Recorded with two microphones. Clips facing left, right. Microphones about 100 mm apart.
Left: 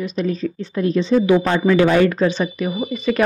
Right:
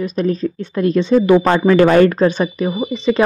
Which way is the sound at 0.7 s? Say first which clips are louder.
Right 3 dB; 60° right (ahead or behind).